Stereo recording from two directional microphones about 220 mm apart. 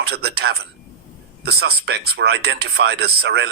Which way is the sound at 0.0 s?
45° right (ahead or behind).